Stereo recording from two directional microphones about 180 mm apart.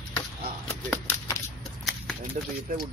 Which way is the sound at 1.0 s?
15° left (ahead or behind).